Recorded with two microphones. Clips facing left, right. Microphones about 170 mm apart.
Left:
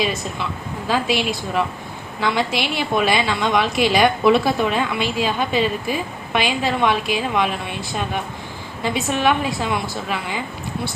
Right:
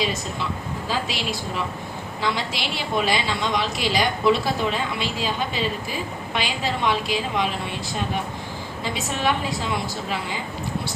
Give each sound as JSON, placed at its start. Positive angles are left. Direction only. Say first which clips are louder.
{"t": 0.0, "sound": "a woman's voice", "louder": "left 3 dB", "side_deg": 60}
{"t": 8.8, "sound": "a woman's voice", "louder": "left 6 dB", "side_deg": 60}